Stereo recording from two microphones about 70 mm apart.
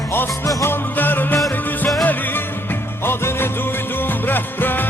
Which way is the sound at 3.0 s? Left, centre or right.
Left.